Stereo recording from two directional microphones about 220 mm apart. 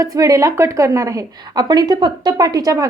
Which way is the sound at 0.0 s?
15° right (ahead or behind).